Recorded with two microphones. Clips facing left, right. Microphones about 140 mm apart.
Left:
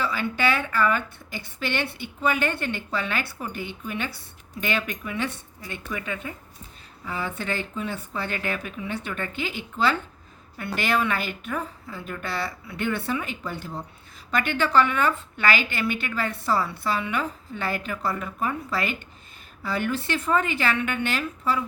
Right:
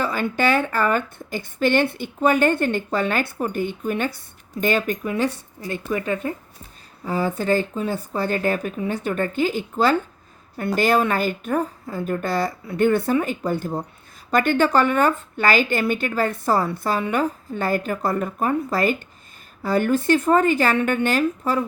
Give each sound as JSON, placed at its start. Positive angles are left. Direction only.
{"t": 0.0, "sound": "a woman's voice", "side_deg": -45}